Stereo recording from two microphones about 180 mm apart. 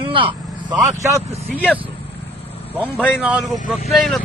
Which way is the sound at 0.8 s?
15° right (ahead or behind).